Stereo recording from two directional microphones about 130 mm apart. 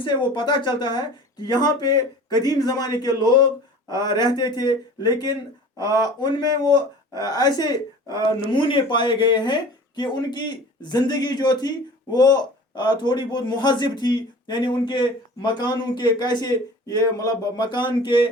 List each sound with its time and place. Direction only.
0.0 s a man's voice: 40° left (ahead or behind)